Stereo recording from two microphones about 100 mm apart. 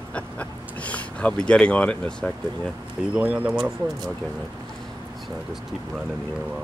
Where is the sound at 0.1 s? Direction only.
15° left (ahead or behind).